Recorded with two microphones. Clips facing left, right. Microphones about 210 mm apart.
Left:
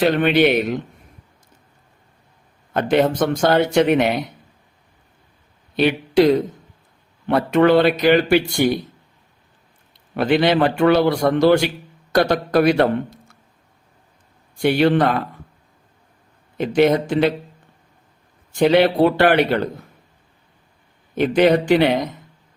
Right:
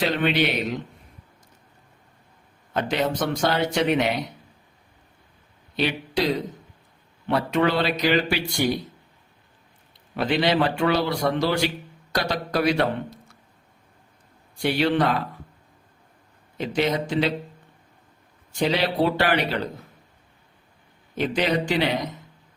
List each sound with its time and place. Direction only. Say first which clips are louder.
0.0 s speech: left 7 dB; 55° left (ahead or behind)
2.7 s speech: left 7 dB; 50° left (ahead or behind)
5.7 s speech: left 9 dB; 55° left (ahead or behind)
10.2 s a man's voice: left 5 dB; 55° left (ahead or behind)
14.6 s speech: left 6 dB; 55° left (ahead or behind)
16.6 s a man's voice: left 8 dB; 55° left (ahead or behind)
18.6 s a man's voice: left 8 dB; 60° left (ahead or behind)
21.2 s a man's voice: left 8 dB; 55° left (ahead or behind)